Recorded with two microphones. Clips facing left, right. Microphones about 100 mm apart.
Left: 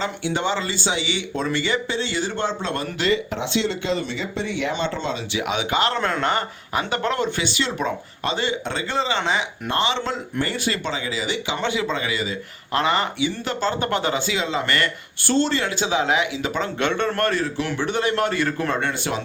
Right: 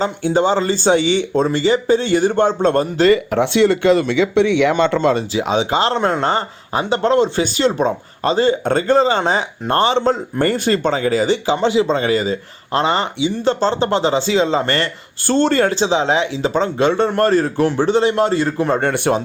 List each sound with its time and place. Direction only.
0.0 s speech: 40° right (ahead or behind)
2.0 s a man's voice: 50° right (ahead or behind)
3.3 s speech: 60° right (ahead or behind)
4.9 s a man's voice: 55° right (ahead or behind)
5.3 s speech: 30° right (ahead or behind)
10.4 s a man's voice: 45° right (ahead or behind)
11.5 s speech: 30° right (ahead or behind)
15.3 s a man's voice: 50° right (ahead or behind)
15.8 s speech: 30° right (ahead or behind)
17.3 s a man's voice: 45° right (ahead or behind)
17.8 s speech: 25° right (ahead or behind)
18.7 s a man's voice: 45° right (ahead or behind)